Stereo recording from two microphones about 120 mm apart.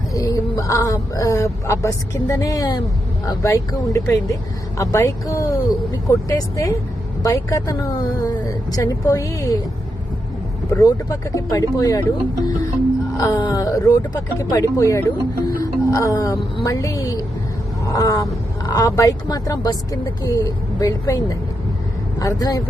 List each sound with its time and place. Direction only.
0.1 s a woman's voice: 30° left (ahead or behind)
10.8 s speech: 30° left (ahead or behind)
13.1 s music: 25° left (ahead or behind)
13.4 s a woman's voice: 30° left (ahead or behind)